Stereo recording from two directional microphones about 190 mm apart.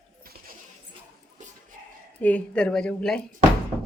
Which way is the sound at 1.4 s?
40° right (ahead or behind).